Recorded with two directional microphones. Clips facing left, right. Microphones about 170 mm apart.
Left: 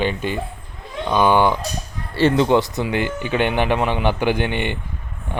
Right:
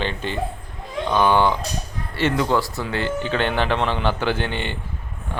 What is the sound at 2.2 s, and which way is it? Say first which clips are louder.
Speech: left 5 dB; 30° left (ahead or behind).